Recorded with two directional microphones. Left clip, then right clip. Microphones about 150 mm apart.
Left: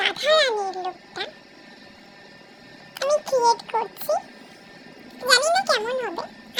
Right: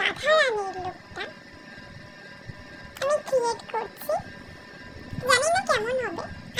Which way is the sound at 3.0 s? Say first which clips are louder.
Left 4 dB; 15° left (ahead or behind).